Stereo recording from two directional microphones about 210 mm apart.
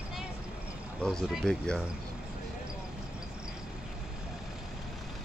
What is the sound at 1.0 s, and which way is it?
Speech, centre (ahead or behind).